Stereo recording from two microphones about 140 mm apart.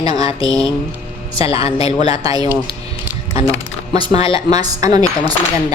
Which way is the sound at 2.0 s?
25° right (ahead or behind).